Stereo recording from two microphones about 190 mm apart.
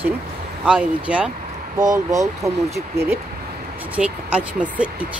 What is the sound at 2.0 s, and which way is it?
Speech, 15° right (ahead or behind).